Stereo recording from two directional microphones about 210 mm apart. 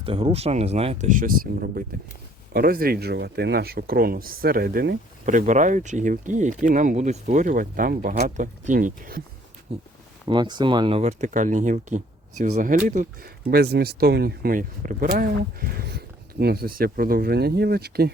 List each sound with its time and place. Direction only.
0.0 s speech: 25° right (ahead or behind); by 9.2 s 40° right (ahead or behind)
9.7 s speech: 30° right (ahead or behind); by 18.1 s 50° right (ahead or behind)